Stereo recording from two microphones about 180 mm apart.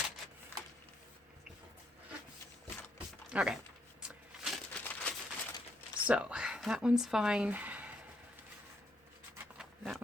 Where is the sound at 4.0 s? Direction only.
5° right (ahead or behind).